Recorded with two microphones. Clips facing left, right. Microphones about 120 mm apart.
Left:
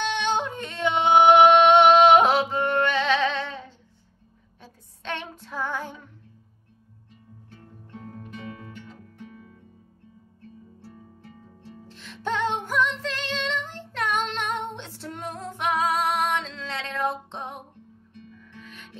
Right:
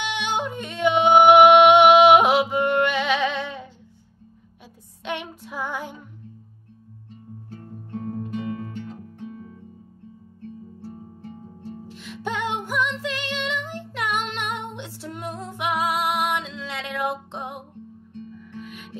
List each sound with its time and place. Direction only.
0.0 s yodeling: 10° right (ahead or behind)
5.0 s child singing: 10° right (ahead or behind)
7.4 s music: 40° right (ahead or behind)
10.8 s music: 40° right (ahead or behind)
11.9 s music: 10° right (ahead or behind)